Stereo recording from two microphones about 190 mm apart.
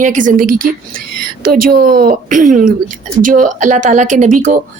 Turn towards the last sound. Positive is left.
turn(degrees=-40)  # may be behind; listen again after turning